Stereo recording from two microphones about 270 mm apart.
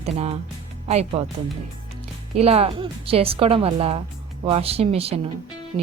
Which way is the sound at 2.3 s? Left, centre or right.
Right.